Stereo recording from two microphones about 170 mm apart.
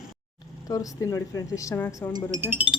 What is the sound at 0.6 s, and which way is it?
Speech, 20° left (ahead or behind).